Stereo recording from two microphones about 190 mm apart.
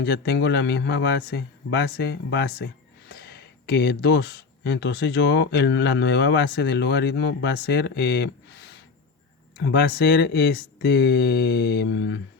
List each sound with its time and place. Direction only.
0.0 s speech: 60° left (ahead or behind)